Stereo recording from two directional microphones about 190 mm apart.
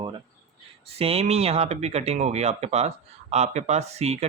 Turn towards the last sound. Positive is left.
turn(degrees=-35)  # may be behind; listen again after turning